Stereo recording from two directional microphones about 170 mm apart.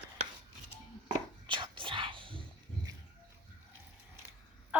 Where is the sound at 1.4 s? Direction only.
30° right (ahead or behind).